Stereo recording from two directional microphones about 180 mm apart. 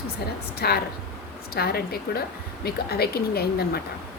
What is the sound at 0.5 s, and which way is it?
Speech, 60° left (ahead or behind).